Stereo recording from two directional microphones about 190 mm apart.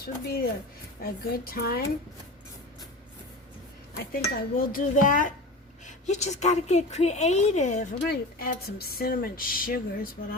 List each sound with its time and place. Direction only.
0.0 s speech: 50° left (ahead or behind)
3.9 s a woman's voice: 50° left (ahead or behind)
8.1 s speech: 55° left (ahead or behind)